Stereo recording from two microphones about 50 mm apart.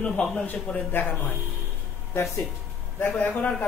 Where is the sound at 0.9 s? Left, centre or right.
Left.